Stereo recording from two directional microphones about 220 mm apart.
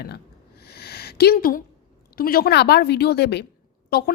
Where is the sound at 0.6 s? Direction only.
45° left (ahead or behind).